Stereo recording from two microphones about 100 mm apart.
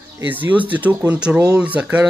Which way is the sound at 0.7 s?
15° right (ahead or behind).